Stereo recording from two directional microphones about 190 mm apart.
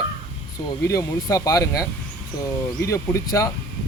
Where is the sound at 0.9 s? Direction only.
20° left (ahead or behind).